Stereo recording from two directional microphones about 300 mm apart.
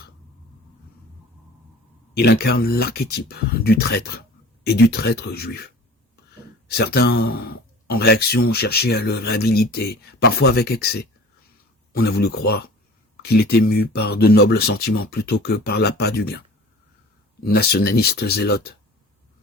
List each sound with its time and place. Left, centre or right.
2.1 s speech: left
17.4 s speech: left